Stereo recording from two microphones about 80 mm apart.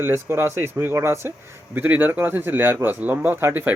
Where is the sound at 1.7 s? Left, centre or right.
Right.